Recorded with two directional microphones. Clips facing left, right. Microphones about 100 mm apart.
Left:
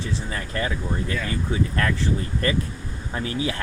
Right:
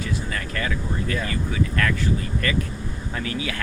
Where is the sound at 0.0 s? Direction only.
25° left (ahead or behind).